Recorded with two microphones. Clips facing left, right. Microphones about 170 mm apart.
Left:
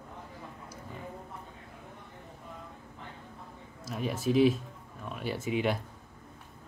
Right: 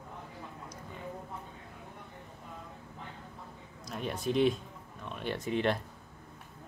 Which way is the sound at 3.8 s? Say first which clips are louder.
Left 3 dB; centre (ahead or behind).